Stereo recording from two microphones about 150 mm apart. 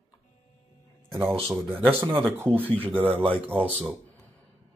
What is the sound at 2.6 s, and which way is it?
Speech, 10° left (ahead or behind).